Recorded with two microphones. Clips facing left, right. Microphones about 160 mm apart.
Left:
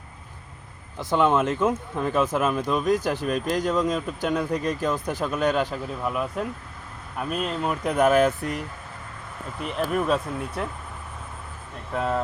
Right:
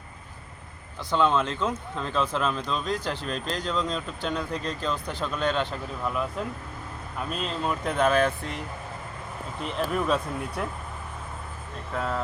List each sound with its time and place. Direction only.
0.9 s speech: 15° left (ahead or behind)
5.7 s speech: 5° left (ahead or behind)
9.6 s speech: 5° left (ahead or behind)